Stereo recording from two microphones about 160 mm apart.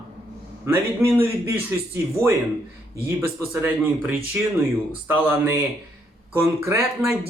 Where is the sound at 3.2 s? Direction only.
15° right (ahead or behind).